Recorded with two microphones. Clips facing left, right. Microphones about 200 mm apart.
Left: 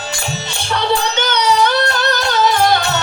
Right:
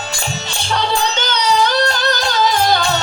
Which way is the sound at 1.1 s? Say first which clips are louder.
Left 2 dB; 60° left (ahead or behind).